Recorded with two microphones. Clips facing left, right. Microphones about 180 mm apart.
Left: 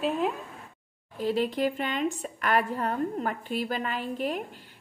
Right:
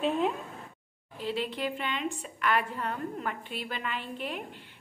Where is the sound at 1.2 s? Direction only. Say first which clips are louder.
Left 6 dB; 45° left (ahead or behind).